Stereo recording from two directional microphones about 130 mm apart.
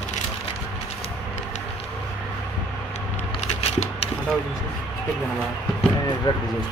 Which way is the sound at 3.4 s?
50° left (ahead or behind).